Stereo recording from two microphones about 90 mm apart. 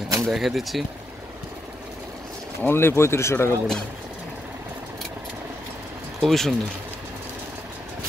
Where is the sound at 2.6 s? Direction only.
25° left (ahead or behind).